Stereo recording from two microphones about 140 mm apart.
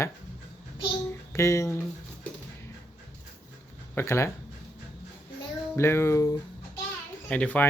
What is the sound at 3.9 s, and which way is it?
Speech, 20° left (ahead or behind).